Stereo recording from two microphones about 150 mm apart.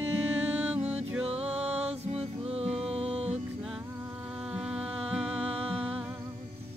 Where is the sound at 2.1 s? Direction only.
45° right (ahead or behind).